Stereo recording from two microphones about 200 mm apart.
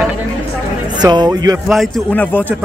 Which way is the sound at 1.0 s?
20° right (ahead or behind).